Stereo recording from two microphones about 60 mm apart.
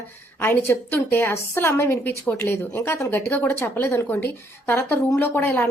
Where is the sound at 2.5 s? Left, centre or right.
Left.